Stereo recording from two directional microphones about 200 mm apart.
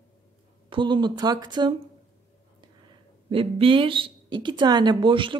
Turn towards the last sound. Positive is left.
turn(degrees=-25)  # may be behind; listen again after turning